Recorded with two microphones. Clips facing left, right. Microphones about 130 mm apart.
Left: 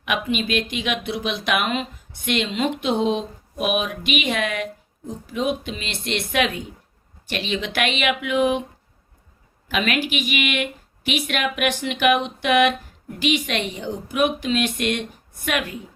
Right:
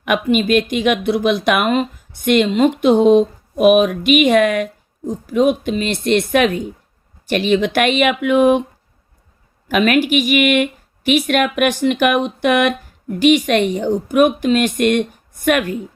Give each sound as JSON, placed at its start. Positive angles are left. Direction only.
{"t": 0.0, "sound": "speech", "side_deg": -50}
{"t": 9.6, "sound": "speech", "side_deg": -45}